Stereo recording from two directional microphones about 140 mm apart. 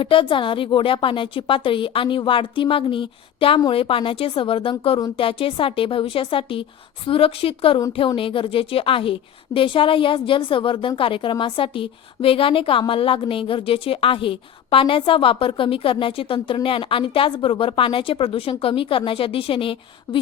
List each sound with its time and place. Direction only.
0.0 s a woman's voice: 40° left (ahead or behind)